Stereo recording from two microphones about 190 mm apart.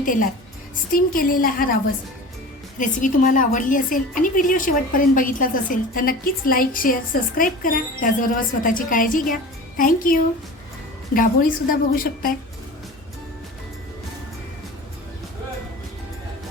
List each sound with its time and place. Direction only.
0.0 s a woman's voice: 45° left (ahead or behind)